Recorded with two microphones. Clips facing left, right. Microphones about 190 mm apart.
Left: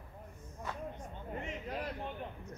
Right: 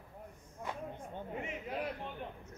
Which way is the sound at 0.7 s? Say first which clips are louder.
Even; 15° right (ahead or behind).